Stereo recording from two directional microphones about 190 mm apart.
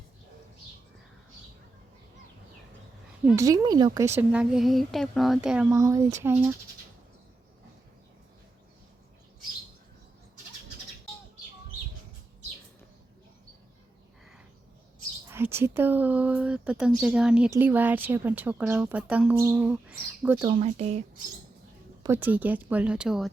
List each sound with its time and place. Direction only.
3.2 s speech: 15° right (ahead or behind)
15.3 s speech: 10° right (ahead or behind)
20.6 s speech: 35° right (ahead or behind)
22.0 s speech: 10° right (ahead or behind)